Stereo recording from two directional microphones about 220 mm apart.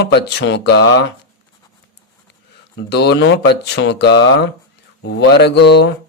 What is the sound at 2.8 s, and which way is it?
Speech, 50° left (ahead or behind).